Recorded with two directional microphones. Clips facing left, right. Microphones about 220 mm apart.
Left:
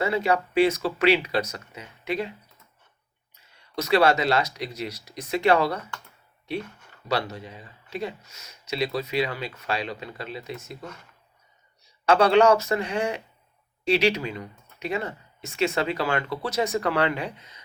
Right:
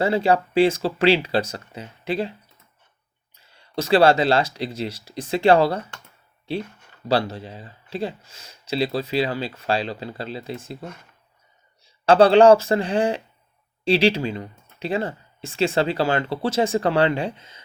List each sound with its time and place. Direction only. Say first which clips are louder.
0.0 s speech: right 4 dB; 30° right (ahead or behind)
3.3 s speech: right 4 dB; 30° right (ahead or behind)